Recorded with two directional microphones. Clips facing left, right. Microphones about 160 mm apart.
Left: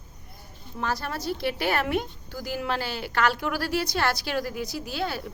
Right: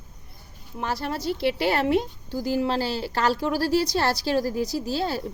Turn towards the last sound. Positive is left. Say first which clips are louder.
# right 4 dB
turn(degrees=-35)  # may be behind; listen again after turning